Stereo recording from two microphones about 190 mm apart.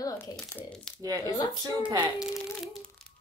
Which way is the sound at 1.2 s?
20° left (ahead or behind).